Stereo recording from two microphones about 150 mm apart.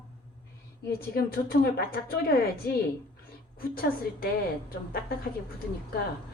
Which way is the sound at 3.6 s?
80° left.